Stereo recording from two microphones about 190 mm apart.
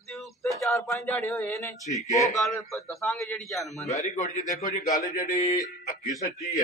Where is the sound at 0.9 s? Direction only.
10° left (ahead or behind).